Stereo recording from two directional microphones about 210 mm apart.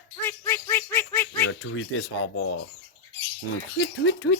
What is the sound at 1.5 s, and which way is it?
Speech, 75° left (ahead or behind).